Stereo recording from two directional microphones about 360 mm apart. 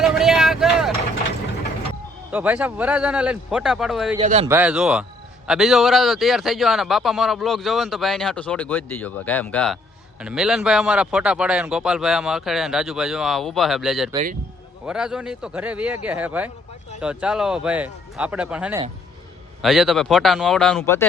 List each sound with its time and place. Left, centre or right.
0.0 s vehicle: centre
2.3 s speech: centre
4.2 s a man's voice: centre
4.5 s speech: centre
14.1 s a man's voice: centre
14.8 s speech: centre